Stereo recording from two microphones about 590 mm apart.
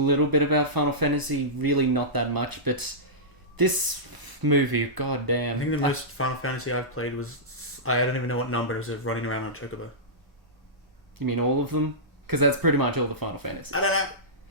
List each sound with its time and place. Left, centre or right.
0.0 s speech: right
5.9 s speech: left
11.3 s speech: right
13.7 s speech: left